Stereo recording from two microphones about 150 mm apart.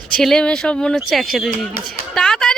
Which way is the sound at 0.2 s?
5° left (ahead or behind).